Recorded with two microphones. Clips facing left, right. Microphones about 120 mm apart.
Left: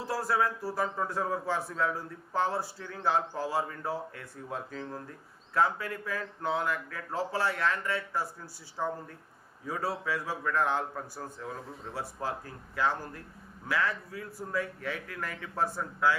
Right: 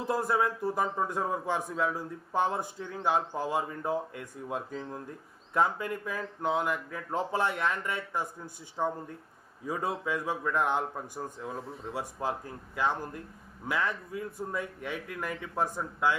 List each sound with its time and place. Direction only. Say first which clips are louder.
0.0 s a man's voice: right 1 dB; 20° right (ahead or behind)